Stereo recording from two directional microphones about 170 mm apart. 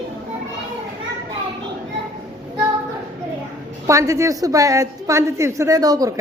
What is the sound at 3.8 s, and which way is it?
A woman's voice, 20° right (ahead or behind).